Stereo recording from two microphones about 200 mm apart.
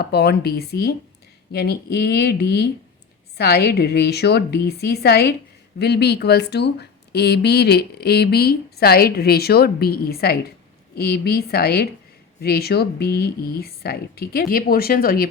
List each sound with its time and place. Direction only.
0.0 s speech: 55° left (ahead or behind)